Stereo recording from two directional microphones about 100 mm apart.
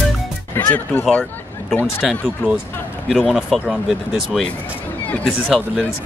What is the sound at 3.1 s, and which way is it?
Speech, centre (ahead or behind).